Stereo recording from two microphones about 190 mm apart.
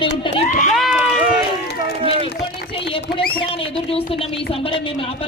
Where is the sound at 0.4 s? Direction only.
40° left (ahead or behind).